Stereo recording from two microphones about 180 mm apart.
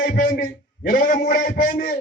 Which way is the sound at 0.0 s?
50° left (ahead or behind).